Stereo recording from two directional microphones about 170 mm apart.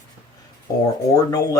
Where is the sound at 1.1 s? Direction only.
20° left (ahead or behind).